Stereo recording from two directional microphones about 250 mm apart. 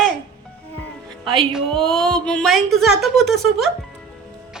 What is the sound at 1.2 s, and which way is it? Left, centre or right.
Music, right.